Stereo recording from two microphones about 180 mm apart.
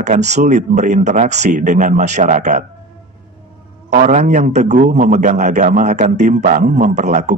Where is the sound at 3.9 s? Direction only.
40° right (ahead or behind).